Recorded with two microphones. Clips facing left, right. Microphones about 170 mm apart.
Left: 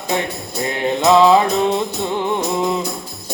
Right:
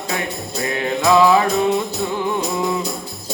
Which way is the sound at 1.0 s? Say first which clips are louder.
Left 2 dB; 25° left (ahead or behind).